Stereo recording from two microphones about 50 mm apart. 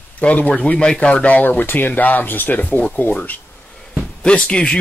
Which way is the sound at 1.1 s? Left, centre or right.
Left.